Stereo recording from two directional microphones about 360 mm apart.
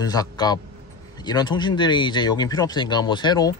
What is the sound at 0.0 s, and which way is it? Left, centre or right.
Speech, centre.